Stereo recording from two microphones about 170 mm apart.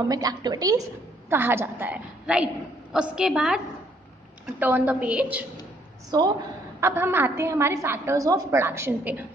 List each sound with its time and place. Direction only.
0.1 s a woman's voice: 25° right (ahead or behind); by 5.4 s 10° right (ahead or behind)
6.0 s a woman's voice: 25° right (ahead or behind)